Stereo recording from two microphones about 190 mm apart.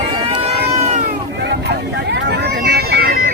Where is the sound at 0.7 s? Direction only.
35° right (ahead or behind).